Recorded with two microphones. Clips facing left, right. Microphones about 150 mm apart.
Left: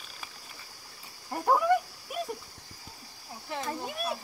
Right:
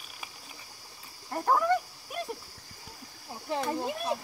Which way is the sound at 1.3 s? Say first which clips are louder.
Left 1 dB; 10° left (ahead or behind).